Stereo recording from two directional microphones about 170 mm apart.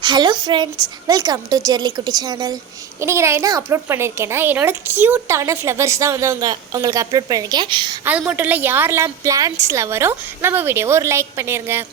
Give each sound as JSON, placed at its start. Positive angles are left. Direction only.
{"t": 0.0, "sound": "a woman's voice", "side_deg": -25}
{"t": 8.2, "sound": "speech", "side_deg": -10}